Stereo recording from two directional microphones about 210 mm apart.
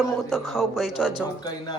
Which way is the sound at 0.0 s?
Centre (ahead or behind).